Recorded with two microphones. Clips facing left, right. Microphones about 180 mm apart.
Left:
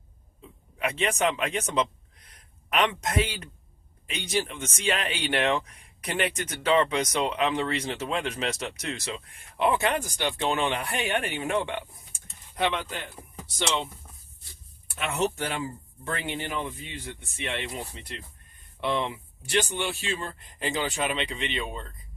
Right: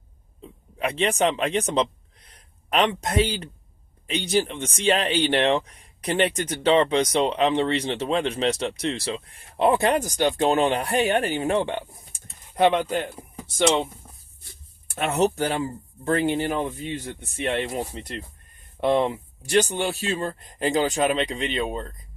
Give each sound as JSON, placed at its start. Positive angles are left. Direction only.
{"t": 0.8, "sound": "speech", "side_deg": -30}
{"t": 12.5, "sound": "speech", "side_deg": -45}
{"t": 13.2, "sound": "speech", "side_deg": -10}
{"t": 13.6, "sound": "speech", "side_deg": -50}
{"t": 14.8, "sound": "speech", "side_deg": -45}